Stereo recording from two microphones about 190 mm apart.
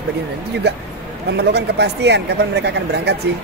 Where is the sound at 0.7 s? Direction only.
60° right (ahead or behind).